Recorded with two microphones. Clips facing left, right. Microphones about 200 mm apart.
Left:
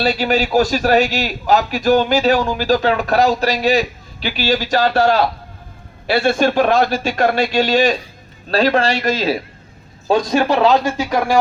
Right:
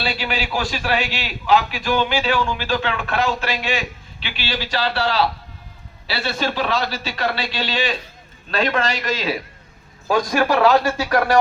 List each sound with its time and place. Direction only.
0.0 s a man's voice: 40° left (ahead or behind)
10.1 s speech: 25° left (ahead or behind)